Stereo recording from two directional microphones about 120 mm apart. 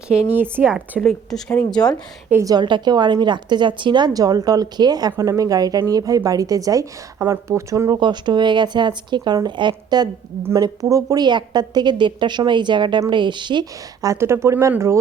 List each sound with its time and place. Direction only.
0.1 s speech: 15° right (ahead or behind)
0.9 s a woman's voice: centre (ahead or behind)
2.3 s a woman's voice: 30° right (ahead or behind)
7.9 s a woman's voice: 40° right (ahead or behind)
14.1 s speech: 20° right (ahead or behind)